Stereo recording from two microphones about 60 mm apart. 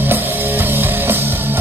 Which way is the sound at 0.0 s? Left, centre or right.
Right.